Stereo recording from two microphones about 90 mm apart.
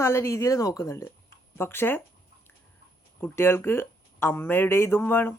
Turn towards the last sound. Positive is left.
turn(degrees=25)  # may be behind; listen again after turning